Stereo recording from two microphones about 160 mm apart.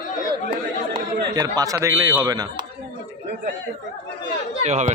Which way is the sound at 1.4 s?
25° right (ahead or behind).